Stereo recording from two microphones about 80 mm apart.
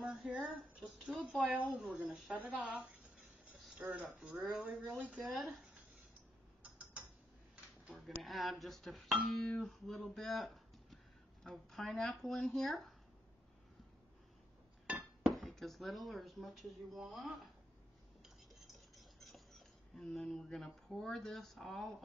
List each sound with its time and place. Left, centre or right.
0.0 s a sound: centre
0.3 s a woman's voice: centre
0.8 s a woman's voice: centre
2.4 s a woman's voice: centre
4.6 s a woman's voice: centre
5.1 s speech: centre
6.6 s mechanisms: centre
7.8 s a sound: centre
8.2 s speech: centre
14.9 s chink: centre
15.3 s speech: centre
18.2 s a sound: centre